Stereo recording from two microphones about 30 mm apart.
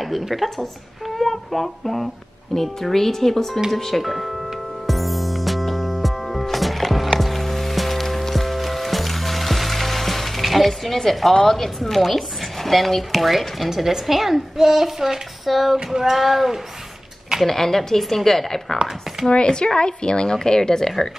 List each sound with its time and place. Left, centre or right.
0.3 s speech: centre
4.0 s music: centre
10.7 s a woman's voice: centre
17.5 s speech: centre
19.2 s speech: left